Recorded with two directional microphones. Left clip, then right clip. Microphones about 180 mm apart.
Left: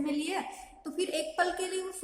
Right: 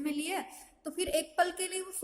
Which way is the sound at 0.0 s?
40° right (ahead or behind).